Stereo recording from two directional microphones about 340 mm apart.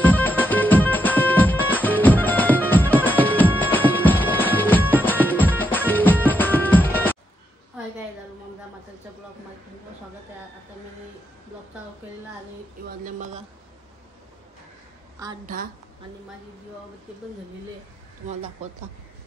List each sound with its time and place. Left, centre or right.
0.0 s music: centre
12.8 s speech: right
15.4 s speech: right